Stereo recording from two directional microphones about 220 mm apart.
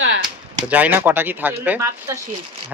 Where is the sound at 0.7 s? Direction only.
10° right (ahead or behind).